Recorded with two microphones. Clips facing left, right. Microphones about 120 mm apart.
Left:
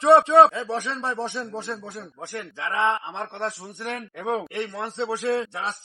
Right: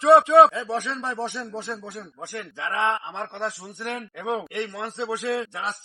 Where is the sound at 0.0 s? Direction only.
Centre (ahead or behind).